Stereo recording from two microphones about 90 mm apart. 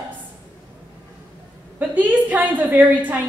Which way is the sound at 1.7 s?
20° right (ahead or behind).